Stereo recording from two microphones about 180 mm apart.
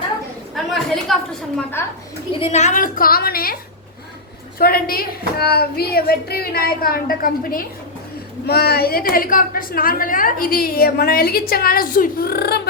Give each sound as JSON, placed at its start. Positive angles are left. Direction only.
{"t": 0.5, "sound": "a woman's voice", "side_deg": 0}
{"t": 2.4, "sound": "a woman's voice", "side_deg": 40}